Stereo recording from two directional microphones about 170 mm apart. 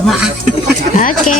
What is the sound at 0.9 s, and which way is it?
Speech, 50° left (ahead or behind).